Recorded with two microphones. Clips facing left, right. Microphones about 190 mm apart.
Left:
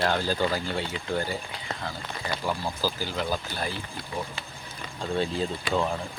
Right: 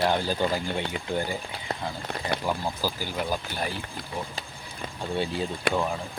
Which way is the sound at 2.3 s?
65° right (ahead or behind).